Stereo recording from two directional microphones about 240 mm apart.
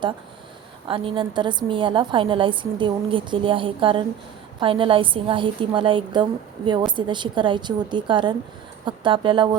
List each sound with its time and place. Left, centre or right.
0.9 s a woman's voice: right